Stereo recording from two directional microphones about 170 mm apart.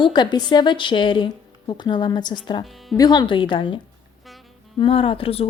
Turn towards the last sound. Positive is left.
turn(degrees=35)  # may be behind; listen again after turning